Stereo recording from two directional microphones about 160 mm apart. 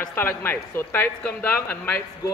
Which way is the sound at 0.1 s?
15° left (ahead or behind).